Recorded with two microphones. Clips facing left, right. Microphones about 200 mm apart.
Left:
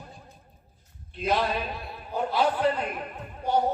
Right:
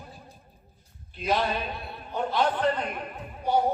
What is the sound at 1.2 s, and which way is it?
A man's voice, centre (ahead or behind).